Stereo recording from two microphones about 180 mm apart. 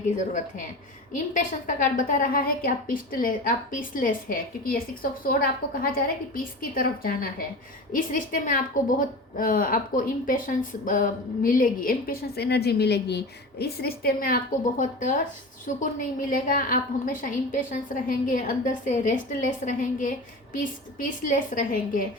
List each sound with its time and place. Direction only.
0.2 s a woman's voice: 45° left (ahead or behind)